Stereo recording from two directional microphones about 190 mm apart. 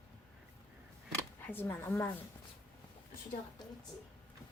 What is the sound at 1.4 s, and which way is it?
Speech, 10° left (ahead or behind).